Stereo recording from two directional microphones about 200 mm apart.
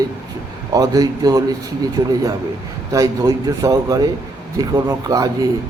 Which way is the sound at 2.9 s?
15° right (ahead or behind).